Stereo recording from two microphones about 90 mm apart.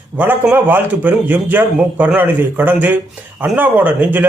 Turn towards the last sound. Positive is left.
turn(degrees=-20)  # may be behind; listen again after turning